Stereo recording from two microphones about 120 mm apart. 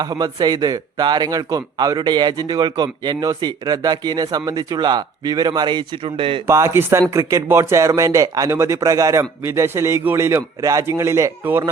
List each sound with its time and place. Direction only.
0.0 s a man's voice: 35° right (ahead or behind); by 6.4 s 50° right (ahead or behind)
6.5 s a man's voice: 25° right (ahead or behind)